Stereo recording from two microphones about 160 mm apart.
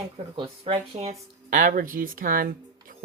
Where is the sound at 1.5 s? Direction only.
55° right (ahead or behind).